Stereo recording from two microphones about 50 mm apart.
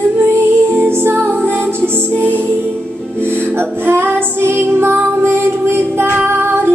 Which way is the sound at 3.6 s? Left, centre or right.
Right.